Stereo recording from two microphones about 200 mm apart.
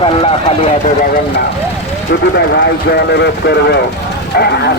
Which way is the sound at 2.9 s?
55° left (ahead or behind).